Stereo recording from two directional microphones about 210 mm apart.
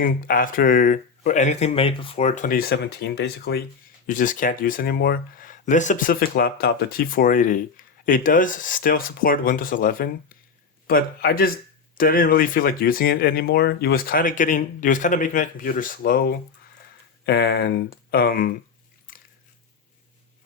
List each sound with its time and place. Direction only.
0.0 s speech: 40° left (ahead or behind)
4.0 s speech: 40° left (ahead or behind)
19.1 s biting: 40° left (ahead or behind)